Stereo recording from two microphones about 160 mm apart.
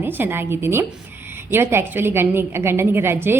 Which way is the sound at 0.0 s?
15° right (ahead or behind).